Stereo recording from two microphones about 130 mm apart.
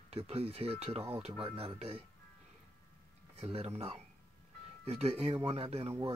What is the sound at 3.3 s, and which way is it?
Speech, 50° right (ahead or behind).